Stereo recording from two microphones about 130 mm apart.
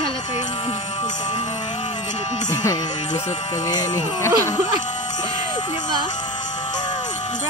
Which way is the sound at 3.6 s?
30° left (ahead or behind).